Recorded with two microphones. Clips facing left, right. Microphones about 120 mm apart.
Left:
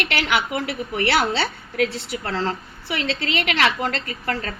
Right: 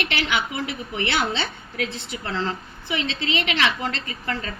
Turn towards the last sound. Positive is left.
turn(degrees=45)  # may be behind; listen again after turning